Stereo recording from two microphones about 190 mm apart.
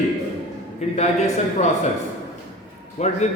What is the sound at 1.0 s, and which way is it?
Speech, 35° left (ahead or behind).